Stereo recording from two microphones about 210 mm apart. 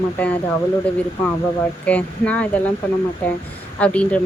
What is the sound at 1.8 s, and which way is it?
Speech, 5° left (ahead or behind).